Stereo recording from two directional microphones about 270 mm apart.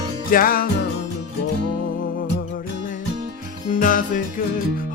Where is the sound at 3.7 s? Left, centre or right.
Left.